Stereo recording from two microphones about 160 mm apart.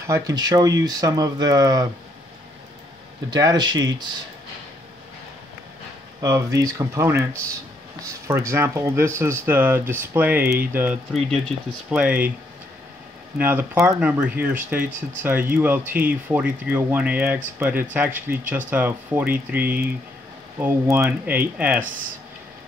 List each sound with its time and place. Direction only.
0.0 s speech: 20° right (ahead or behind)
3.3 s speech: 25° right (ahead or behind)
6.2 s speech: 20° right (ahead or behind)
11.1 s speech: 5° left (ahead or behind)
12.0 s speech: 10° right (ahead or behind)
13.4 s speech: 10° right (ahead or behind)